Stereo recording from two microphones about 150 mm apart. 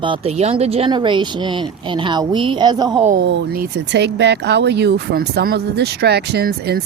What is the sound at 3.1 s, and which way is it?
Speech, 85° right.